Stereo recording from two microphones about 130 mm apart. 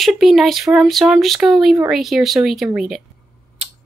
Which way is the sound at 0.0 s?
Centre (ahead or behind).